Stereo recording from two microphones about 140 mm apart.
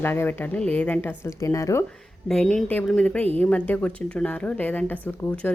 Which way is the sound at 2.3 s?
5° left (ahead or behind).